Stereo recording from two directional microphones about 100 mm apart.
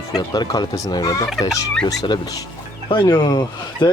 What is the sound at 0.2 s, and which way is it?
Speech, 45° left (ahead or behind).